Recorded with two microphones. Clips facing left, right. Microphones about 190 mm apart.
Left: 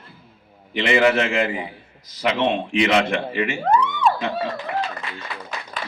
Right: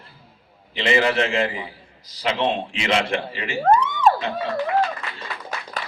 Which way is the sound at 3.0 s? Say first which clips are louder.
Left 3 dB; 30° right (ahead or behind).